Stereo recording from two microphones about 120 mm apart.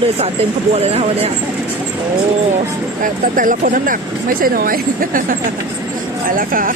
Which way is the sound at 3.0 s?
90° right.